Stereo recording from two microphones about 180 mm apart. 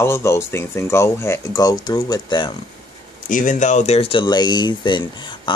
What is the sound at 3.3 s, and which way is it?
Speech, 45° left (ahead or behind).